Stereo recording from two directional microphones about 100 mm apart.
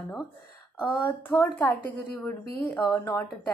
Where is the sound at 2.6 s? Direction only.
35° left (ahead or behind).